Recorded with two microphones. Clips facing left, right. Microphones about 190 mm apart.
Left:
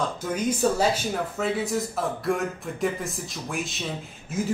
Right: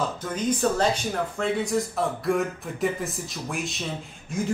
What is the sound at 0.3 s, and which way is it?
A man's voice, 10° left (ahead or behind).